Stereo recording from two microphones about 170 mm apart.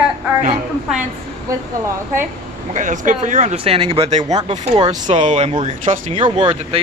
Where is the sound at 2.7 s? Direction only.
45° right (ahead or behind).